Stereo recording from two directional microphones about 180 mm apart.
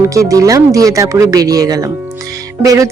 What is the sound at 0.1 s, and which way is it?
A woman's voice, 20° right (ahead or behind).